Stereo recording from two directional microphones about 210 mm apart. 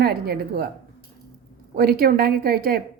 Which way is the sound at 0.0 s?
45° right (ahead or behind).